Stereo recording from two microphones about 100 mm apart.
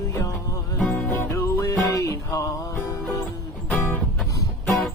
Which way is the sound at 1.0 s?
25° left (ahead or behind).